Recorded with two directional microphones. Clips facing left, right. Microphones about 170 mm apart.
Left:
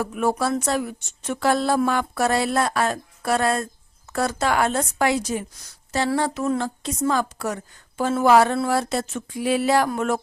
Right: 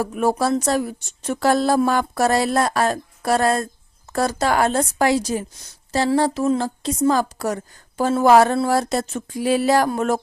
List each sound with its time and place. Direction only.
0.0 s speech: 40° right (ahead or behind)